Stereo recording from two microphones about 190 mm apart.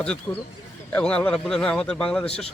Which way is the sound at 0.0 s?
5° left (ahead or behind).